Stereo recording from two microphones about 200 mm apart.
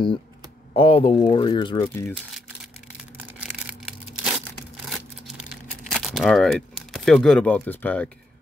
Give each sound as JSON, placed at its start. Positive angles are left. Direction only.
{"t": 0.7, "sound": "speech", "side_deg": 30}
{"t": 3.3, "sound": "crushing", "side_deg": -5}
{"t": 5.9, "sound": "speech", "side_deg": 0}